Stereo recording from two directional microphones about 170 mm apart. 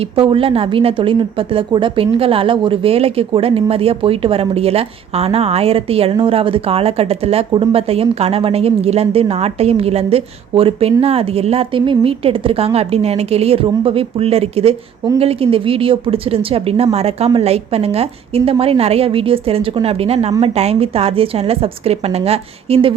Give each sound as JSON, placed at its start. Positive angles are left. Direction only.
{"t": 0.0, "sound": "a woman's voice", "side_deg": -30}